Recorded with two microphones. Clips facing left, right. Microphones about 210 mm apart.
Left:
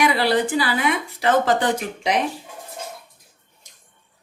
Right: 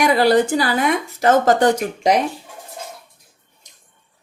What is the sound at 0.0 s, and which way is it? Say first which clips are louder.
A woman's voice: right 5 dB; 45° right (ahead or behind).